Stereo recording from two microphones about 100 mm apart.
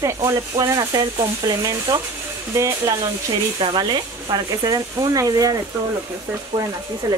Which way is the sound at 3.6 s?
50° right (ahead or behind).